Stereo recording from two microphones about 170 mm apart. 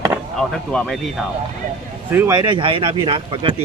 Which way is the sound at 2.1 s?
20° right (ahead or behind).